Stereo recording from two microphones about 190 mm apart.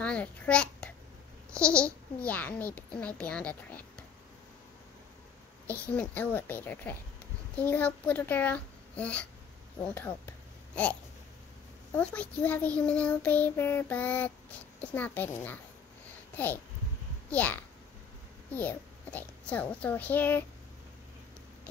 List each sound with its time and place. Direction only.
0.0 s babbling: 5° left (ahead or behind)
2.2 s child singing: 10° left (ahead or behind)
5.7 s child singing: 10° left (ahead or behind)
9.9 s a sound: 10° left (ahead or behind)
12.0 s child singing: 5° left (ahead or behind)
17.3 s a child's voice: 10° left (ahead or behind)